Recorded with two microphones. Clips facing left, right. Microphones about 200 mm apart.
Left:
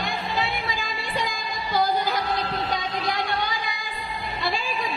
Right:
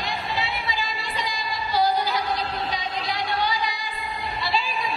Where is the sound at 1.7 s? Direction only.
50° left (ahead or behind).